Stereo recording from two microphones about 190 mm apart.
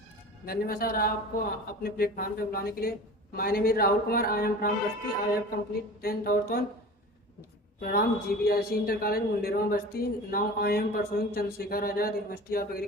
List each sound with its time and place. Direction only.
0.4 s a woman's voice: 50° left (ahead or behind)
6.0 s a woman's voice: 50° left (ahead or behind)
7.8 s a woman's voice: 50° left (ahead or behind)